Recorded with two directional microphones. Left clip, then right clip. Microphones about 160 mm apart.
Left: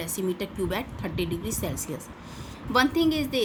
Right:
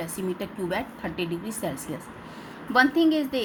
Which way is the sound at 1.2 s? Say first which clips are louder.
Left 1 dB; 50° left (ahead or behind).